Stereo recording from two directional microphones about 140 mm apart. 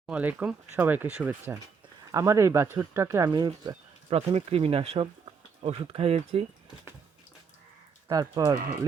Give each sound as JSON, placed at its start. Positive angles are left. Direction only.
{"t": 0.0, "sound": "speech", "side_deg": -10}
{"t": 3.3, "sound": "speech", "side_deg": -30}
{"t": 4.1, "sound": "speech", "side_deg": -45}
{"t": 8.1, "sound": "speech", "side_deg": -25}